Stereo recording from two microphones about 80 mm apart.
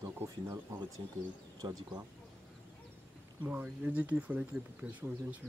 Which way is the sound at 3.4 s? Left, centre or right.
Right.